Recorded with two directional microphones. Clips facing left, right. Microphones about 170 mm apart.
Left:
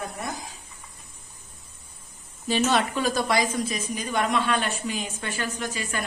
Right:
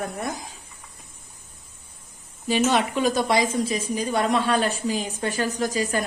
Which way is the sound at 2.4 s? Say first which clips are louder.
Right 2 dB; 15° right (ahead or behind).